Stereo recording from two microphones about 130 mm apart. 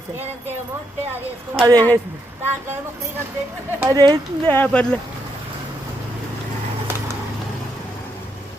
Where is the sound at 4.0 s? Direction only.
35° right (ahead or behind).